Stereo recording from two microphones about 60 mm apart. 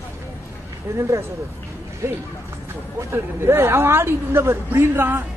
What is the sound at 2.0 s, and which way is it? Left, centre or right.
Speech, right.